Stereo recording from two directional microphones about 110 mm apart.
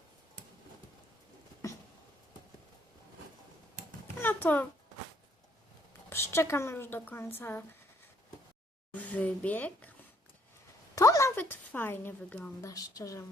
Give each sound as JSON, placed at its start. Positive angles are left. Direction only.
{"t": 4.2, "sound": "a sound", "side_deg": 20}
{"t": 6.1, "sound": "speech", "side_deg": 20}
{"t": 8.9, "sound": "speech", "side_deg": 15}
{"t": 10.9, "sound": "a sound", "side_deg": 30}
{"t": 11.3, "sound": "a woman's voice", "side_deg": 20}
{"t": 12.6, "sound": "a woman's voice", "side_deg": 35}